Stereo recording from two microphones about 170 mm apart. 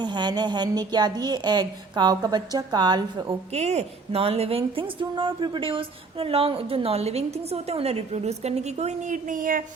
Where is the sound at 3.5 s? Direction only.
40° right (ahead or behind).